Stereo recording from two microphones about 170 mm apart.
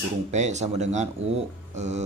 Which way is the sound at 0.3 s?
40° right (ahead or behind).